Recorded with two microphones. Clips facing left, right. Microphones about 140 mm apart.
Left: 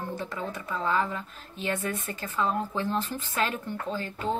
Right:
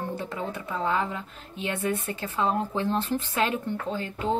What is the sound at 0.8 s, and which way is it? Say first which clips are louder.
Speech: even; 25° right (ahead or behind).